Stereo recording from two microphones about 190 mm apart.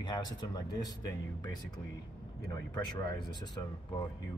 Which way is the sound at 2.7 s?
20° left (ahead or behind).